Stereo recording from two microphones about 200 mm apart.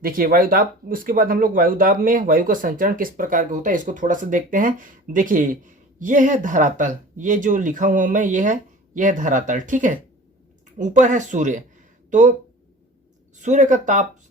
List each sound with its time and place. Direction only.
0.0 s speech: 45° right (ahead or behind)
13.4 s speech: 40° right (ahead or behind)